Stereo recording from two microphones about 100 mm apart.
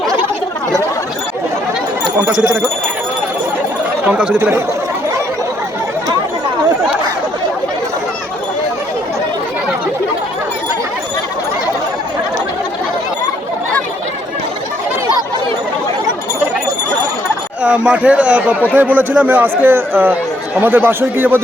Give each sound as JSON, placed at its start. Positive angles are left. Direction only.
{"t": 4.0, "sound": "speech", "side_deg": -10}
{"t": 17.6, "sound": "a man's voice", "side_deg": -10}